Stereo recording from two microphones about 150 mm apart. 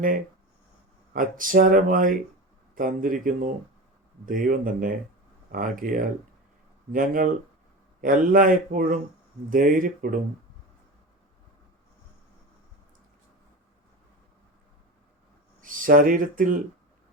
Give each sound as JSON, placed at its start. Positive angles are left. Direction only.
{"t": 1.1, "sound": "a man's voice", "side_deg": -65}
{"t": 15.6, "sound": "speech", "side_deg": -65}